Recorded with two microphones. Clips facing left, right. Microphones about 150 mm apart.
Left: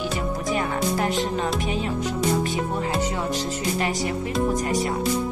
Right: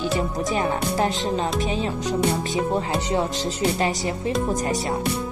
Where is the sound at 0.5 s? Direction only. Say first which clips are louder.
Left 2 dB; 25° right (ahead or behind).